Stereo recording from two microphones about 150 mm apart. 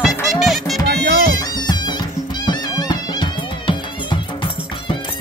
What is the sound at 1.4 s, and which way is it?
Music, 25° left (ahead or behind).